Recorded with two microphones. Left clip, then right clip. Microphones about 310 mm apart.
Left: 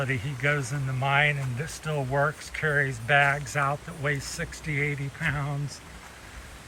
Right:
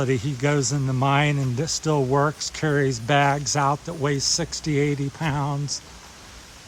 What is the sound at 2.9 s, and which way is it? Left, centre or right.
Speech, centre.